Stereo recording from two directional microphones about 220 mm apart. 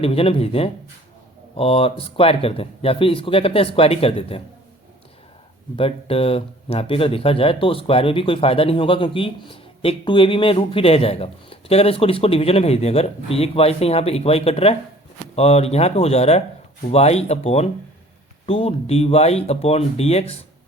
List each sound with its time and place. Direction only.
0.0 s speech: 25° left (ahead or behind)
5.7 s speech: 25° left (ahead or behind)